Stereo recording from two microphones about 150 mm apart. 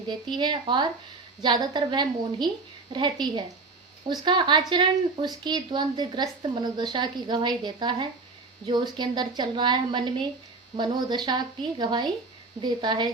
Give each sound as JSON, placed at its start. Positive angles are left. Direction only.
{"t": 0.1, "sound": "a woman's voice", "side_deg": -30}